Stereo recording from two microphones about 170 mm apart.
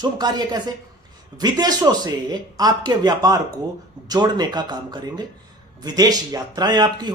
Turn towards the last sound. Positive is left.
turn(degrees=-25)  # may be behind; listen again after turning